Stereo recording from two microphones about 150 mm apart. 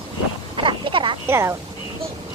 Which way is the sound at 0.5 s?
35° right (ahead or behind).